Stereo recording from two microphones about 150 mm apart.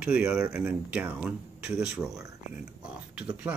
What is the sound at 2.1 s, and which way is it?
Speech, 20° right (ahead or behind).